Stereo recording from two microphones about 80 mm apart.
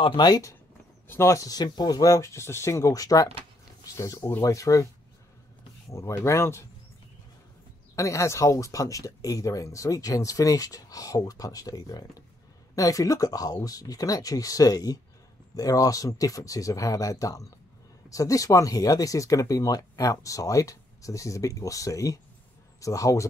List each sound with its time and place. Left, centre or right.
0.0 s speech: left
1.0 s speech: left
5.9 s speech: left
7.9 s speech: left